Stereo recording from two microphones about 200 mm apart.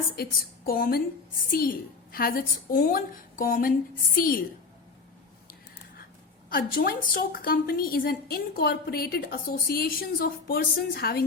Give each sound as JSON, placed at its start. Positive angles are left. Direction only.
{"t": 0.2, "sound": "a woman's voice", "side_deg": 50}
{"t": 6.5, "sound": "a woman's voice", "side_deg": 45}